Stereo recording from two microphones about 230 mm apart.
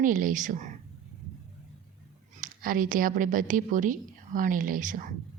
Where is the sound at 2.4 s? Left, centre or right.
Right.